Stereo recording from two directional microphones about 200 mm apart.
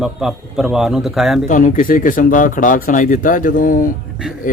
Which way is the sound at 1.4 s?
40° left (ahead or behind).